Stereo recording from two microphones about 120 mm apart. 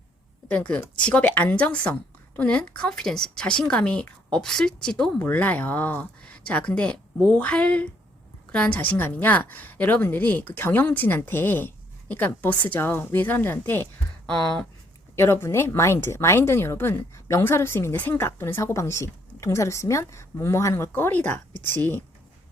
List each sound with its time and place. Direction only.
0.4 s a woman's voice: 10° left (ahead or behind)
14.3 s a woman's voice: 5° left (ahead or behind)
15.1 s speech: 20° left (ahead or behind)